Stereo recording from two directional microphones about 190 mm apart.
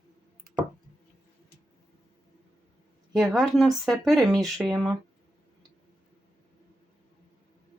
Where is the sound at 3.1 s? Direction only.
Centre (ahead or behind).